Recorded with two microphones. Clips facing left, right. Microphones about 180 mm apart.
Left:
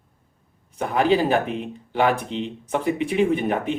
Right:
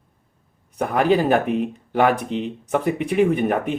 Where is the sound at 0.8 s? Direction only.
55° right (ahead or behind).